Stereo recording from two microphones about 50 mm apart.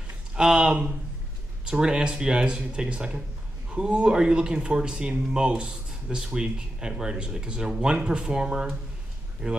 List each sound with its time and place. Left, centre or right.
0.4 s speech: centre